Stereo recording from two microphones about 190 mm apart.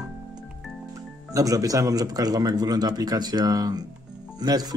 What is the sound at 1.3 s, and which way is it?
Speech, 20° right (ahead or behind).